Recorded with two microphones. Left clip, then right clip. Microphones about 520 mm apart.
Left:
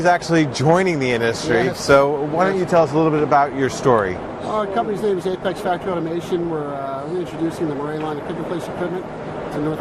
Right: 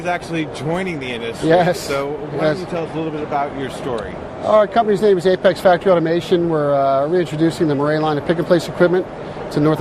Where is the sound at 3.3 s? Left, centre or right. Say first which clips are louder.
Left 4 dB; left.